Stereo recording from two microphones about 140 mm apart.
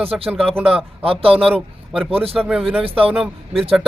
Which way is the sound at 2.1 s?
40° right (ahead or behind).